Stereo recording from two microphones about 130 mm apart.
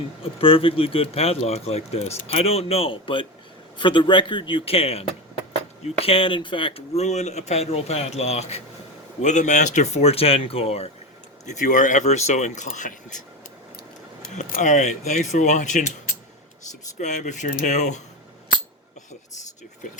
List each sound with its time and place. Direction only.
0.2 s speech: 45° left (ahead or behind)
9.2 s speech: 70° left (ahead or behind); by 10.9 s 50° left (ahead or behind)
11.4 s speech: 75° left (ahead or behind)
14.3 s speech: 80° left
17.0 s speech: 65° left (ahead or behind)